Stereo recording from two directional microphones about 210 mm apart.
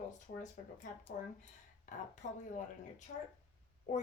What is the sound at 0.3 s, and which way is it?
Speech, 35° left (ahead or behind).